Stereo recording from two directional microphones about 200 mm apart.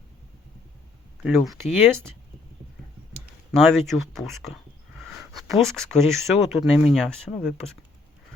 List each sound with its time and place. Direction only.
1.2 s speech: centre (ahead or behind)
3.5 s speech: centre (ahead or behind)